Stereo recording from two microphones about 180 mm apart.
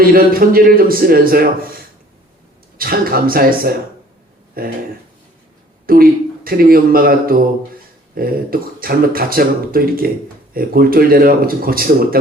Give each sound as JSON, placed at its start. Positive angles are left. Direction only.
{"t": 0.0, "sound": "speech", "side_deg": -55}
{"t": 2.7, "sound": "speech", "side_deg": -55}
{"t": 5.8, "sound": "speech", "side_deg": -55}